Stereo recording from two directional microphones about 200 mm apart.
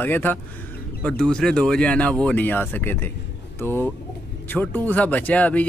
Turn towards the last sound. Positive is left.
turn(degrees=10)  # may be behind; listen again after turning